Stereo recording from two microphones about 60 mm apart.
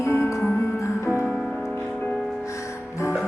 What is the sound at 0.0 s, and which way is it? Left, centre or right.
Music, left.